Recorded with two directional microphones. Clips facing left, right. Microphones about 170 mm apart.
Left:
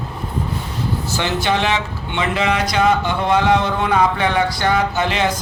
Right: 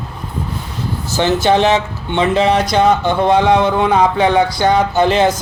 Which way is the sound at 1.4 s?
35° right (ahead or behind).